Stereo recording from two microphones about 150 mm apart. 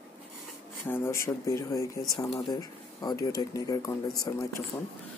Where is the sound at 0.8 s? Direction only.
15° left (ahead or behind).